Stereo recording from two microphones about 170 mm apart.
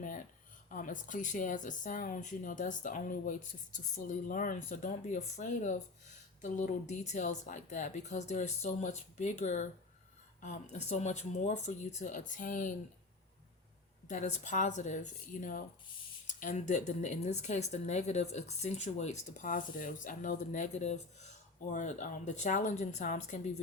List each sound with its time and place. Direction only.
0.0 s a sound: 50° left (ahead or behind)
0.7 s speech: 50° left (ahead or behind)
14.1 s speech: 45° left (ahead or behind)